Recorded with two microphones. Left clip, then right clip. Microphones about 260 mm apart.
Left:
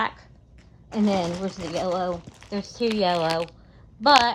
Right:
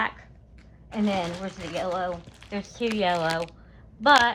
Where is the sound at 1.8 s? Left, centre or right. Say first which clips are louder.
Left 2 dB; centre.